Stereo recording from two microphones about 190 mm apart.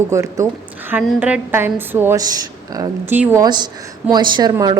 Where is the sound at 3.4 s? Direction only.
20° right (ahead or behind).